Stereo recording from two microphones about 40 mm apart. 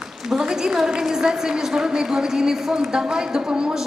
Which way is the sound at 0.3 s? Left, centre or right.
Centre.